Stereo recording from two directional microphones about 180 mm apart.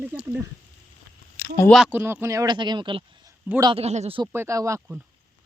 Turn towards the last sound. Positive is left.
turn(degrees=-15)  # may be behind; listen again after turning